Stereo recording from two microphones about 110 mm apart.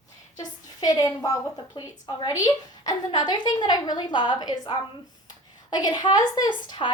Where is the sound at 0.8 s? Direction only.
35° left (ahead or behind).